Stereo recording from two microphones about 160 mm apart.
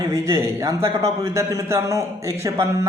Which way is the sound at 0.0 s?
20° right (ahead or behind).